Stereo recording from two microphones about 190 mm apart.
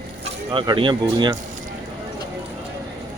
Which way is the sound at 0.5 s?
25° right (ahead or behind).